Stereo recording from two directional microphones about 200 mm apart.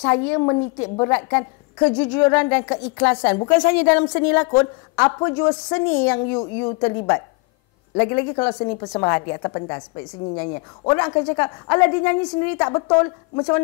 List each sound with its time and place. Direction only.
0.0 s a woman's voice: 15° left (ahead or behind)
1.1 s speech: 15° left (ahead or behind)
6.4 s a woman's voice: 25° left (ahead or behind)
7.9 s speech: 15° left (ahead or behind)